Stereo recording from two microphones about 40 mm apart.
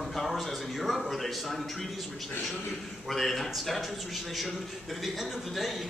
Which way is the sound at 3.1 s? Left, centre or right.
Centre.